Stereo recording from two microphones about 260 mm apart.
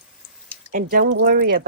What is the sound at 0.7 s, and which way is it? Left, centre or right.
Speech, right.